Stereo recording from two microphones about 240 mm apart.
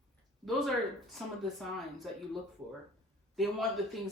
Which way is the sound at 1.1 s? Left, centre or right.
Centre.